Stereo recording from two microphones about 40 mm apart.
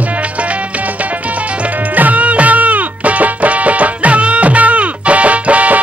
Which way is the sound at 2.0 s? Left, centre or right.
Right.